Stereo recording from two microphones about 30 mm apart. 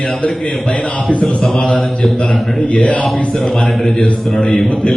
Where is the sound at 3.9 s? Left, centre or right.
Left.